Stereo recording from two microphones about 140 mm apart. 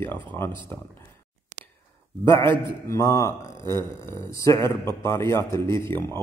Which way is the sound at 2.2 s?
20° left (ahead or behind).